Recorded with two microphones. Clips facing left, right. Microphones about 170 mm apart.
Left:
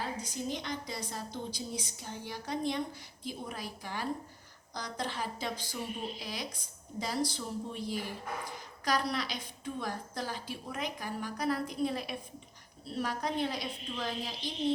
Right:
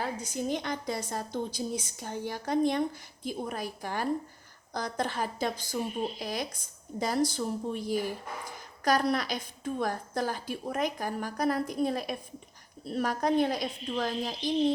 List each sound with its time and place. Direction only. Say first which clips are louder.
0.0 s a woman's voice: right 4 dB; 50° right (ahead or behind)